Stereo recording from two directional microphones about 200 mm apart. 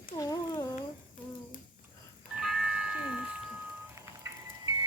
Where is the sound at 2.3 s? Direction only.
Centre (ahead or behind).